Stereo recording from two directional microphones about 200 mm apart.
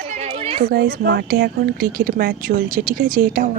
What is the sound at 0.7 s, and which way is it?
A woman's voice, 55° right (ahead or behind).